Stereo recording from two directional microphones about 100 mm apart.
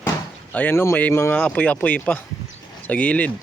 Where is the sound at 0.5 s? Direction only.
20° left (ahead or behind).